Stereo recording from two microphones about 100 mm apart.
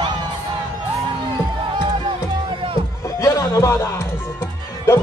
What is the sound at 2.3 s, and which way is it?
Music, 50° right (ahead or behind).